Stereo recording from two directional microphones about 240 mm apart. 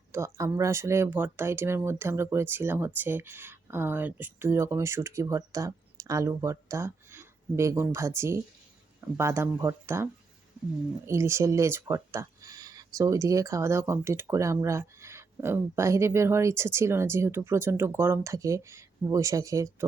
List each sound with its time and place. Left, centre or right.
0.1 s speech: centre